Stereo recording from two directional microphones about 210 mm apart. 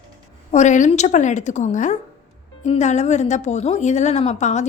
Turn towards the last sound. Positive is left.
turn(degrees=35)  # may be behind; listen again after turning